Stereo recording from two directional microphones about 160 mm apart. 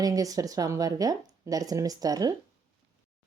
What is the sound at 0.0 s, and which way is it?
Speech, 20° right (ahead or behind).